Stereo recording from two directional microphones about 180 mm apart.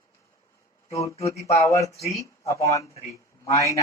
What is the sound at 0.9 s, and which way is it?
Speech, 15° left (ahead or behind).